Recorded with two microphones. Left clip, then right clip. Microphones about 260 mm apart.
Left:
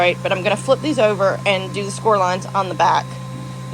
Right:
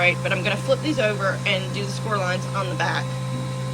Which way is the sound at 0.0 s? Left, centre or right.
Centre.